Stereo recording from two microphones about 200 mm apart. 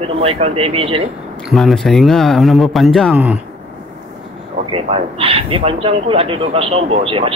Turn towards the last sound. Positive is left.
turn(degrees=-30)  # may be behind; listen again after turning